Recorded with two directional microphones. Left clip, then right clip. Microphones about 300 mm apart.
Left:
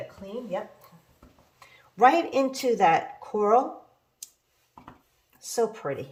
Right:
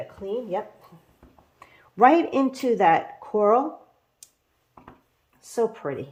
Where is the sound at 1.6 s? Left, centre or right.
Centre.